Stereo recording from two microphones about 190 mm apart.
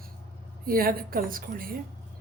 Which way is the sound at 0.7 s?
50° right (ahead or behind).